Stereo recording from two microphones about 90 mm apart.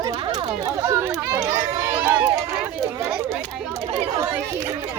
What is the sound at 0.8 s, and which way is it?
Run, 25° right (ahead or behind).